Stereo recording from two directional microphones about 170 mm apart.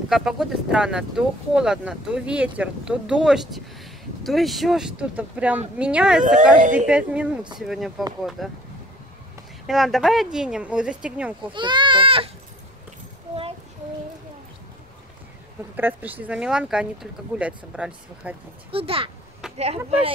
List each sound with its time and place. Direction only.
0.1 s speech: centre (ahead or behind)
6.2 s speech: 50° right (ahead or behind)
6.9 s speech: 5° right (ahead or behind)
9.7 s speech: centre (ahead or behind)
11.5 s speech: 25° right (ahead or behind)
15.7 s speech: 10° right (ahead or behind)
18.7 s speech: 35° right (ahead or behind)